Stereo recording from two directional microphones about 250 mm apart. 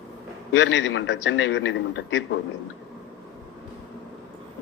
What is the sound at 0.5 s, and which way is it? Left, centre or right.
A man's voice, left.